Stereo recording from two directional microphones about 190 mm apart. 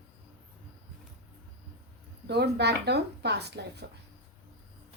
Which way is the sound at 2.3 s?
60° right (ahead or behind).